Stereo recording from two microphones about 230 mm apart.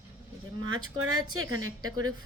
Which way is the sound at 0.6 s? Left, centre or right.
Right.